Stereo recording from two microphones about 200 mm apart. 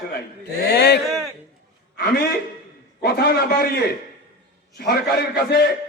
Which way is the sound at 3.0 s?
55° left (ahead or behind).